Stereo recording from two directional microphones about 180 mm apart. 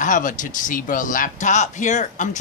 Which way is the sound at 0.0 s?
45° left (ahead or behind).